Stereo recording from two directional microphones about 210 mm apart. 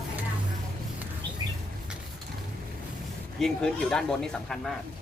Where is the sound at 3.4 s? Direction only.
Centre (ahead or behind).